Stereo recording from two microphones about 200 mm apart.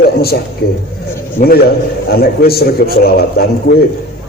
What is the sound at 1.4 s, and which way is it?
A man's voice, 40° left (ahead or behind).